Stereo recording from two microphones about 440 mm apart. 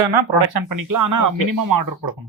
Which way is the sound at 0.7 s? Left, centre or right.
Right.